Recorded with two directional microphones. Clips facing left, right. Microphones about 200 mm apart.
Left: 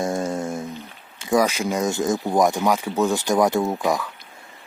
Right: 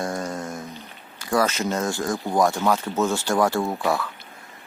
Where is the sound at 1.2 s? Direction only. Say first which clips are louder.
Left 3 dB; 15° left (ahead or behind).